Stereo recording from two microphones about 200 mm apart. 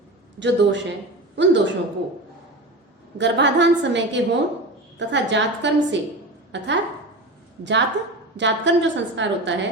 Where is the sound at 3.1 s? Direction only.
60° right (ahead or behind).